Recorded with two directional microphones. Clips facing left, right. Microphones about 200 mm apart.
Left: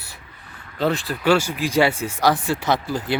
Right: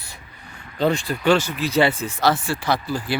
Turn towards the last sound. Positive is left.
turn(degrees=20)  # may be behind; listen again after turning